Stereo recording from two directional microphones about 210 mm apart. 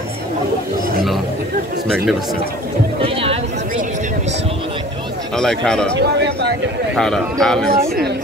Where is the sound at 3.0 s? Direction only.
25° right (ahead or behind).